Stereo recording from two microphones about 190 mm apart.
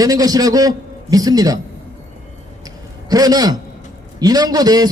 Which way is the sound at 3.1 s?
20° right (ahead or behind).